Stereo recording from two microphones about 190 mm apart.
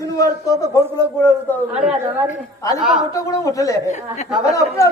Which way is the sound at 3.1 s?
15° left (ahead or behind).